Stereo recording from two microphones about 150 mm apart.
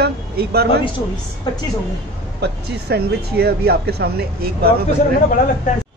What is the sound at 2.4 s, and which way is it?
Speech, 90° right.